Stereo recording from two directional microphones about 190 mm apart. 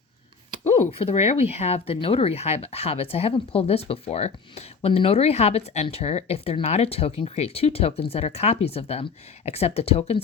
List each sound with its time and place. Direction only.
0.6 s speech: 35° left (ahead or behind)